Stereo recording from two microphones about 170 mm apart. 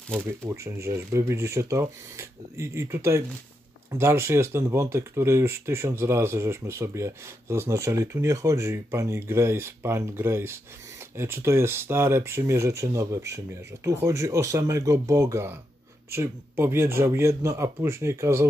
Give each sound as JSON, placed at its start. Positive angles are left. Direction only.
{"t": 0.5, "sound": "speech", "side_deg": -15}